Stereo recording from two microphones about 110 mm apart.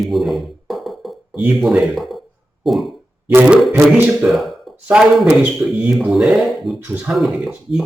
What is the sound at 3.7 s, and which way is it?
Music, 15° right (ahead or behind).